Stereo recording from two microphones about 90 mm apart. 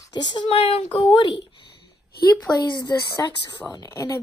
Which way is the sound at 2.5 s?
50° left (ahead or behind).